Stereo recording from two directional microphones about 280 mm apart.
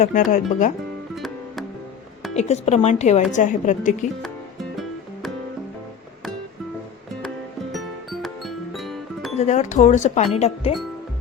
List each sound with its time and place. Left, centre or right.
0.0 s speech: left
1.1 s music: centre
2.3 s speech: left
7.7 s music: centre
9.4 s speech: left